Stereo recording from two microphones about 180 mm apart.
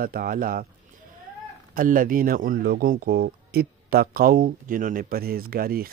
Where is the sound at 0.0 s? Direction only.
55° right (ahead or behind).